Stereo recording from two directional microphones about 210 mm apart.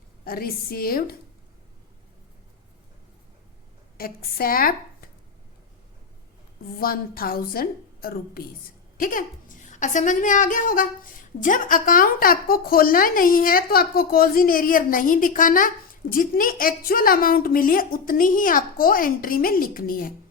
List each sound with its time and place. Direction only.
0.3 s a woman's voice: 45° left (ahead or behind)
3.9 s a woman's voice: 45° left (ahead or behind)
6.7 s a woman's voice: 45° left (ahead or behind)